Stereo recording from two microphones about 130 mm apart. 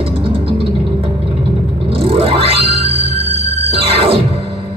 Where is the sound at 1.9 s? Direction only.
45° right (ahead or behind).